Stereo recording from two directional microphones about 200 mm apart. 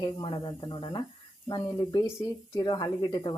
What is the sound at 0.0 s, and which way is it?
Speech, 25° left (ahead or behind).